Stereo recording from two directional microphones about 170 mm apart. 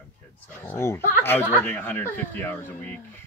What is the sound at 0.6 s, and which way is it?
Speech, 15° left (ahead or behind).